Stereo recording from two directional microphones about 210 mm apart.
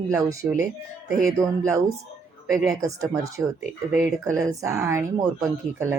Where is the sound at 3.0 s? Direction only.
15° right (ahead or behind).